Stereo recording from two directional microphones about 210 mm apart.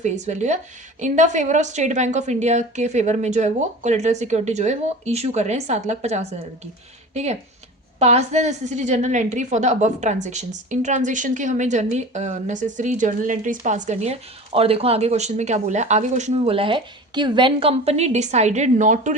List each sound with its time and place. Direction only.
0.0 s a woman's voice: 35° right (ahead or behind)